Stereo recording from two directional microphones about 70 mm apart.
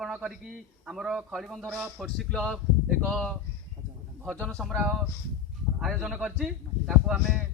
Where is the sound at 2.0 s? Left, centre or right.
Centre.